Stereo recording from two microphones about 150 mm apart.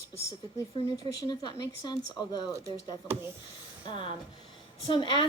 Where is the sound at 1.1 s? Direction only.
25° left (ahead or behind).